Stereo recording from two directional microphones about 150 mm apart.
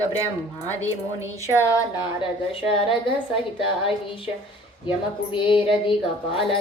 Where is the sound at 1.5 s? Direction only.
15° left (ahead or behind).